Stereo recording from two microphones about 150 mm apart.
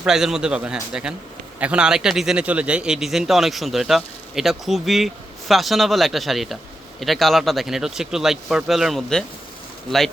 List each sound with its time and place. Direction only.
0.0 s a man's voice: 5° right (ahead or behind)